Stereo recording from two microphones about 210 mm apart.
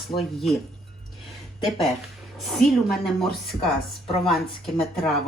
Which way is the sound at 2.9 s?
Centre (ahead or behind).